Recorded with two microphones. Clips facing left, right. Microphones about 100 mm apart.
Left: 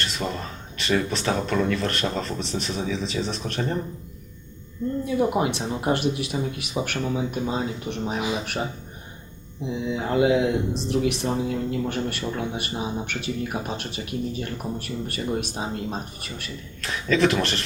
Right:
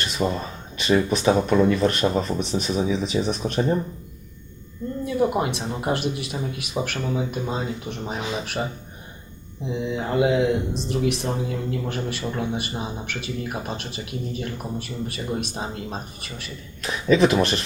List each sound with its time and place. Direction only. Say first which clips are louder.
0.0 s a sound: right 4 dB; 15° right (ahead or behind)
0.8 s speech: right 4 dB; 15° right (ahead or behind)
5.0 s speech: right 1 dB; centre (ahead or behind)
9.6 s speech: even; centre (ahead or behind)
16.8 s speech: right 3 dB; 15° right (ahead or behind)